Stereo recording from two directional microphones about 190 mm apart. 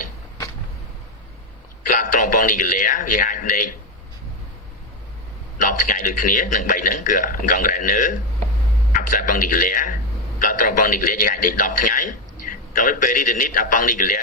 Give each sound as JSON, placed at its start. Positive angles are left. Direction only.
{"t": 1.8, "sound": "a man's voice", "side_deg": 45}
{"t": 5.5, "sound": "a man's voice", "side_deg": 45}